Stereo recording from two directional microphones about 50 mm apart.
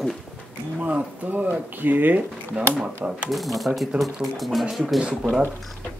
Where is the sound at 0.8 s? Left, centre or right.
Right.